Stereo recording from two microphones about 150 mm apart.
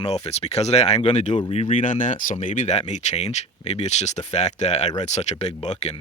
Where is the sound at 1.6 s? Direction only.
55° left (ahead or behind).